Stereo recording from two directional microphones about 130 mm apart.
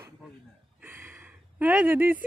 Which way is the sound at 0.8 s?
15° right (ahead or behind).